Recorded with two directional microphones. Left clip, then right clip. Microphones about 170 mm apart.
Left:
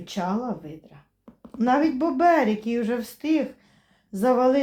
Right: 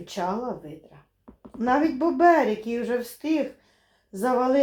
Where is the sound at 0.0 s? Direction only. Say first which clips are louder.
Even; 30° left (ahead or behind).